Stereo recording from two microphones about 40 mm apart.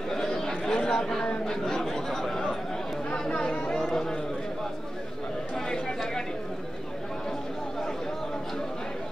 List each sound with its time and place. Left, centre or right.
0.1 s chatter: centre
1.4 s speech: centre
3.1 s chatter: left
3.7 s a sound: centre